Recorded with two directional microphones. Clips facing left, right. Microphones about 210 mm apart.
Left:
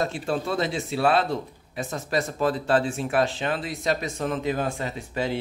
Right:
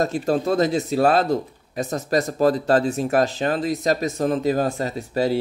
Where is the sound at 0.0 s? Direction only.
40° right (ahead or behind).